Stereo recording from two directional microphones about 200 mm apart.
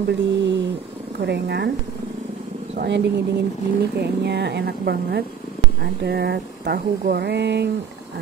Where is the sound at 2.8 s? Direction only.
60° right (ahead or behind).